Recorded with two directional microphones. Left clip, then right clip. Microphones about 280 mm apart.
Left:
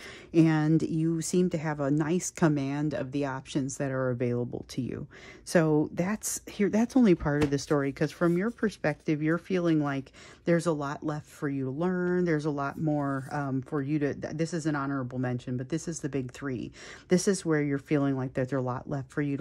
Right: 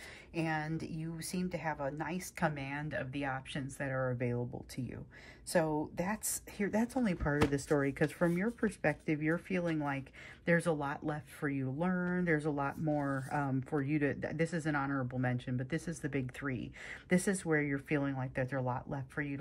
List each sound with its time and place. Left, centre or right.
0.3 s speech: left
5.5 s speech: left